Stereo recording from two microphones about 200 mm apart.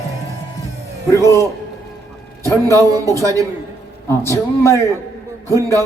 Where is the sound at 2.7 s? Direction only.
15° right (ahead or behind).